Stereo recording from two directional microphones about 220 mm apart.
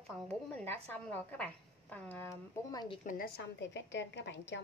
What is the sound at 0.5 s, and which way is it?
A woman's voice, 5° left (ahead or behind).